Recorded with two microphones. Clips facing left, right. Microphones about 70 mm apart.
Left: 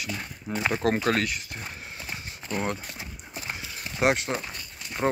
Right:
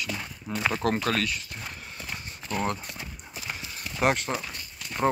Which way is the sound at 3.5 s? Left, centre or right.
Centre.